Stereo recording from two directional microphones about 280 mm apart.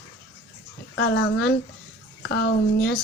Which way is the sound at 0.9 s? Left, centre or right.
Left.